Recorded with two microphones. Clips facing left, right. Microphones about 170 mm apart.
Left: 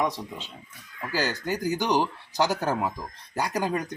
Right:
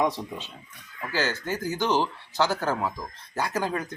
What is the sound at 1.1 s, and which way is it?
Speech, 15° left (ahead or behind).